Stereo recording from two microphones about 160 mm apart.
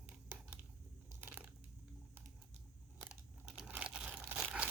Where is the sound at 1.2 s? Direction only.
10° right (ahead or behind).